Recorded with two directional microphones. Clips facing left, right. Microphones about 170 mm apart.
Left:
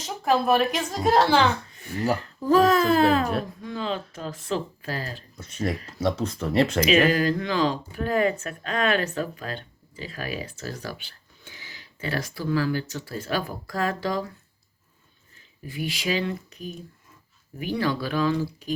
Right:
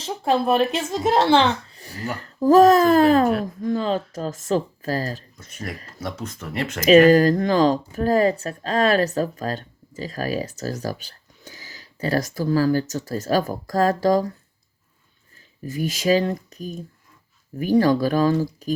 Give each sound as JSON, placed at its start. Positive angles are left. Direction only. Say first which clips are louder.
{"t": 0.0, "sound": "speech", "louder": "right 2 dB", "side_deg": -30}
{"t": 5.4, "sound": "speech", "louder": "left 5 dB", "side_deg": 30}
{"t": 6.8, "sound": "speech", "louder": "right 13 dB", "side_deg": -40}
{"t": 15.6, "sound": "speech", "louder": "right 7 dB", "side_deg": -40}